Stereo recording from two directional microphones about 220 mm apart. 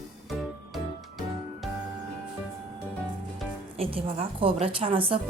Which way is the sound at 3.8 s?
25° right (ahead or behind).